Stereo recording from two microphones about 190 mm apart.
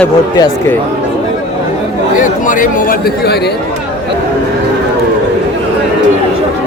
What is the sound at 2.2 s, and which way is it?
Speech, 45° left (ahead or behind).